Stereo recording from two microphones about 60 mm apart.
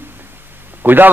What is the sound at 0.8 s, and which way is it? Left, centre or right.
Speech, right.